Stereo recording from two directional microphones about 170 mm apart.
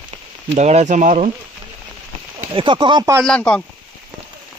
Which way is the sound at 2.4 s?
30° right (ahead or behind).